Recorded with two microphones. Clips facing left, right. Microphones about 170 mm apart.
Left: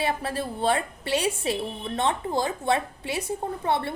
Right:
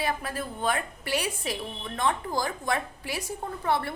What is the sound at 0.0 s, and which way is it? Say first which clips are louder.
A woman's voice: left 3 dB; 30° left (ahead or behind).